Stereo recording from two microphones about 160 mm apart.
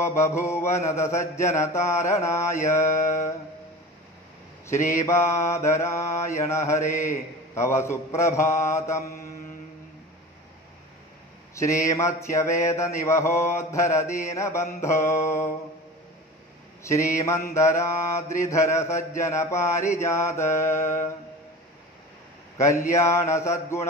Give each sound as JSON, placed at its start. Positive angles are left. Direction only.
{"t": 0.0, "sound": "mantra", "side_deg": 15}
{"t": 4.8, "sound": "mantra", "side_deg": 20}
{"t": 11.5, "sound": "speech", "side_deg": 20}
{"t": 12.2, "sound": "mantra", "side_deg": 20}
{"t": 16.8, "sound": "speech", "side_deg": 20}
{"t": 17.6, "sound": "mantra", "side_deg": 20}
{"t": 22.7, "sound": "mantra", "side_deg": 20}